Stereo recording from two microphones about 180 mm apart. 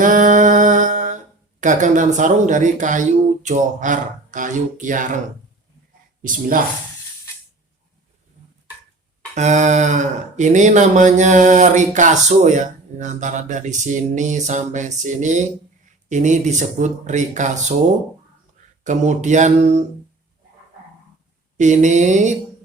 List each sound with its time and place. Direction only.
0.0 s a sound: 45° right (ahead or behind)
1.6 s speech: 45° right (ahead or behind)
9.3 s speech: 40° right (ahead or behind)
18.8 s speech: 40° right (ahead or behind)
21.6 s speech: 40° right (ahead or behind)